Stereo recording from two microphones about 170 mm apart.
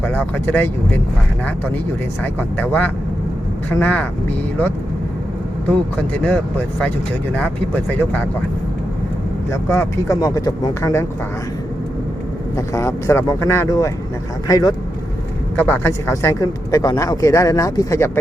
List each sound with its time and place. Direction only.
0.0 s speech: 10° left (ahead or behind)
2.2 s speech: 10° left (ahead or behind)
6.2 s speech: 5° left (ahead or behind)
9.5 s speech: 15° left (ahead or behind)
12.5 s speech: 20° left (ahead or behind)
15.5 s speech: 10° left (ahead or behind)